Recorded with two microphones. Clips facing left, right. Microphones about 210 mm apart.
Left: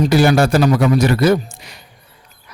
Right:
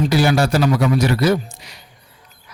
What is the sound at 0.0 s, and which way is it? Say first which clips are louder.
A man's voice: left 3 dB; 50° left (ahead or behind).